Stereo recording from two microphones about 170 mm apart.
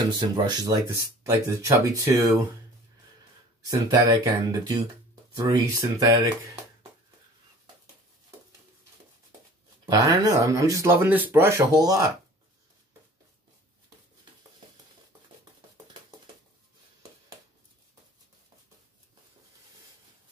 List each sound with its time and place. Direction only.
0.2 s speech: 25° right (ahead or behind)
3.6 s speech: 20° right (ahead or behind)
9.8 s speech: 20° right (ahead or behind)